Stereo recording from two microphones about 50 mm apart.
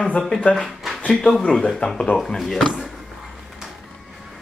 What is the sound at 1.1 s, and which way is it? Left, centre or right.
Speech, centre.